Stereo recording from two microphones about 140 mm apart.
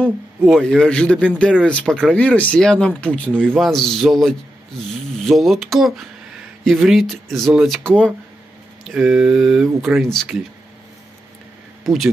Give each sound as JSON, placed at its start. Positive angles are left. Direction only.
{"t": 0.0, "sound": "a man's voice", "side_deg": 5}
{"t": 11.8, "sound": "speech", "side_deg": 0}